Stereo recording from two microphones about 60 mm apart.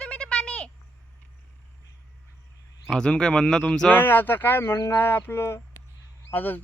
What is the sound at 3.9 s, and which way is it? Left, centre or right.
Speech, left.